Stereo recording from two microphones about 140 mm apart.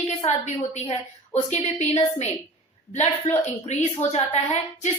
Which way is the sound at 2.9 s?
55° left (ahead or behind).